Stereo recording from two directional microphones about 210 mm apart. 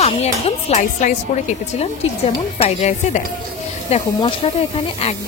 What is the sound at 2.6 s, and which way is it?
Speech, 30° left (ahead or behind).